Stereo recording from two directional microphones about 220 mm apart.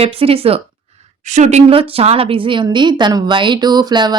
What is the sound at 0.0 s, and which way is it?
Speech, 25° right (ahead or behind).